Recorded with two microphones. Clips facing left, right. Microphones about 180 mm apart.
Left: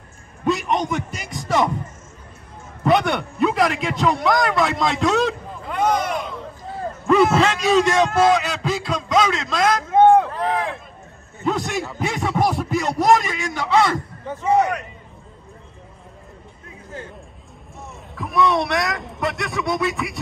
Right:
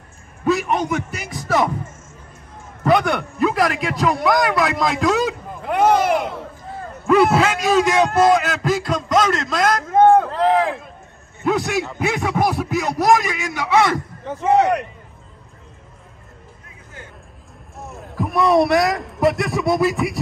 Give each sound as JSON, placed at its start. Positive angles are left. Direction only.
{"t": 0.5, "sound": "a sound", "side_deg": -5}
{"t": 2.8, "sound": "a man's voice", "side_deg": 0}
{"t": 5.7, "sound": "a sound", "side_deg": -70}
{"t": 7.3, "sound": "a man's voice", "side_deg": 0}
{"t": 11.4, "sound": "a man's voice", "side_deg": -5}
{"t": 14.5, "sound": "a man's voice", "side_deg": -65}
{"t": 17.7, "sound": "a man's voice", "side_deg": 0}